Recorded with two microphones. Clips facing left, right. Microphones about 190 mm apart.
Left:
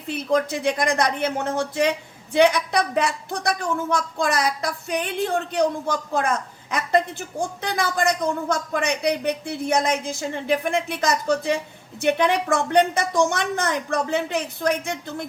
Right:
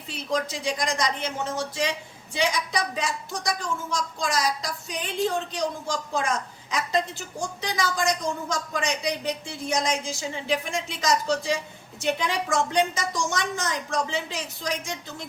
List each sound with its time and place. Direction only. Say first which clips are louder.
0.1 s speech: left 6 dB; 55° left (ahead or behind)